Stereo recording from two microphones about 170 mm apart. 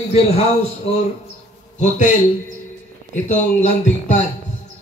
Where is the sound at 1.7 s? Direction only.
45° left (ahead or behind).